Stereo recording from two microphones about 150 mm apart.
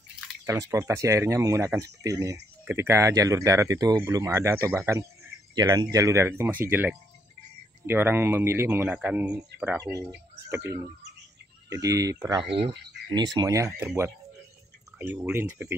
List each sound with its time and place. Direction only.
0.5 s speech: 20° right (ahead or behind)
5.5 s speech: 25° right (ahead or behind)
11.7 s speech: 20° right (ahead or behind)
12.5 s frog: 40° right (ahead or behind)
13.2 s speech: 25° right (ahead or behind)
13.7 s speech: 10° right (ahead or behind)